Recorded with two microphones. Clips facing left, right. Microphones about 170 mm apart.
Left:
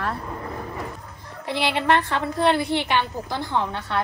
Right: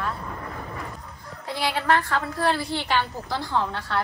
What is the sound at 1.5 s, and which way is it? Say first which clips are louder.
A woman's voice: left 2 dB; 25° left (ahead or behind).